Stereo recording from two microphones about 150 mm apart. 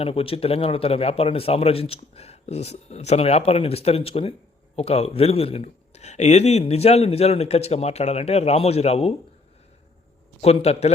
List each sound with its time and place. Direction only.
0.0 s a man's voice: 40° left (ahead or behind)
10.4 s a man's voice: 45° left (ahead or behind)